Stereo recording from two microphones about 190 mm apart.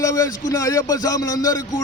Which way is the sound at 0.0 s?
15° left (ahead or behind).